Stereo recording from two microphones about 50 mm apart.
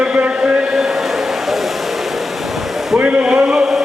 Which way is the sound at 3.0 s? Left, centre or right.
Right.